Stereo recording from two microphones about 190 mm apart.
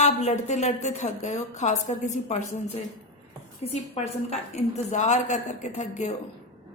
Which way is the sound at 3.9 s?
35° left (ahead or behind).